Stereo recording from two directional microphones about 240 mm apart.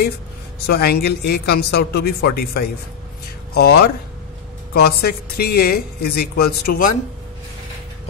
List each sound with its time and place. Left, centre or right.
0.7 s a man's voice: left